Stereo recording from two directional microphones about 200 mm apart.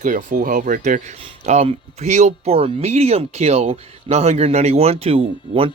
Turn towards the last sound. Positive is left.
turn(degrees=-30)  # may be behind; listen again after turning